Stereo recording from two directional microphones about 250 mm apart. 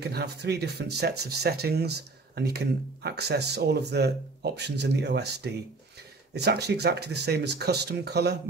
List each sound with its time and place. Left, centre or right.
0.0 s speech: right